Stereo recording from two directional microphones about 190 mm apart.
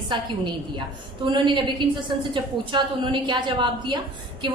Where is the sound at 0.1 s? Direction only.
25° right (ahead or behind).